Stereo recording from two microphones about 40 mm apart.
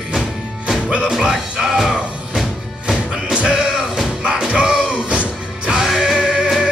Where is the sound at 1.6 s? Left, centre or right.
Centre; by 5.7 s right.